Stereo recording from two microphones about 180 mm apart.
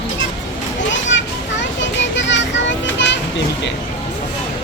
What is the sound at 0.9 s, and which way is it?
Children playing, 90° left.